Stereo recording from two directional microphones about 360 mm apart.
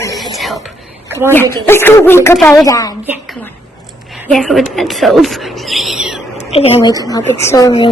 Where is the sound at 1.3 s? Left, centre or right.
Centre.